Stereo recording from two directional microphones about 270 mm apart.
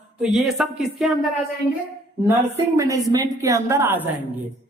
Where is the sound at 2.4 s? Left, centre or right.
Centre.